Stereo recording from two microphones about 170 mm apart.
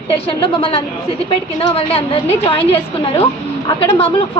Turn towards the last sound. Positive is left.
turn(degrees=35)  # may be behind; listen again after turning